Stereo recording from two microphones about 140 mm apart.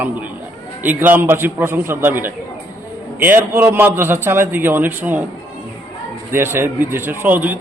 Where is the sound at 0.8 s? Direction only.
15° right (ahead or behind).